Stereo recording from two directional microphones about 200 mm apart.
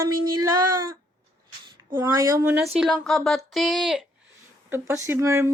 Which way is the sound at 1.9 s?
15° right (ahead or behind).